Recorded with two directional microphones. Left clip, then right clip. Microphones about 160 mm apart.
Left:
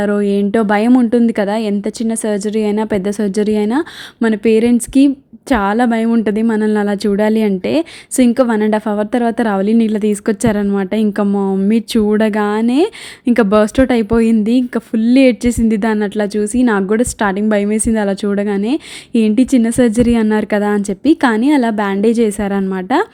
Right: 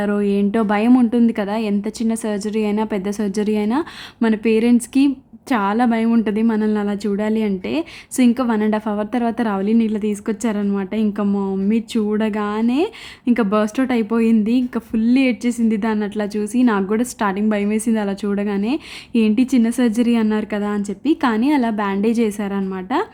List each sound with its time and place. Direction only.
0.0 s speech: 25° left (ahead or behind)